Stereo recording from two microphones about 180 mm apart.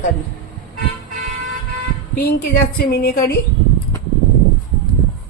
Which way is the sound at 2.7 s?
60° left (ahead or behind).